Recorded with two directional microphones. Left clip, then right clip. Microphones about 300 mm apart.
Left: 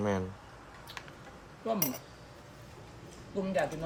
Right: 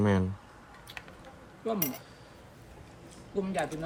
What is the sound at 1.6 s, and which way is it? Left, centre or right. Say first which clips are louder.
Speech: even; centre.